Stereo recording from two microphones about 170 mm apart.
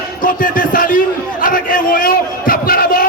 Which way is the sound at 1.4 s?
55° left (ahead or behind).